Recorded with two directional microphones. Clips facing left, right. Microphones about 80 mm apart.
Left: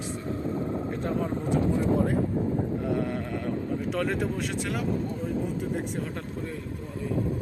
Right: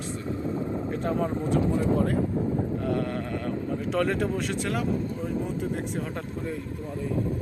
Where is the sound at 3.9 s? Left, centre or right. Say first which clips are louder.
Right 4 dB; centre.